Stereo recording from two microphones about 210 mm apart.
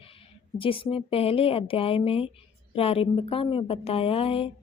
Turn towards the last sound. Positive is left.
turn(degrees=25)  # may be behind; listen again after turning